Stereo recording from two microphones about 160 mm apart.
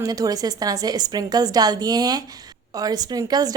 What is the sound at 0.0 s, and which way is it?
A woman's voice, 20° right (ahead or behind).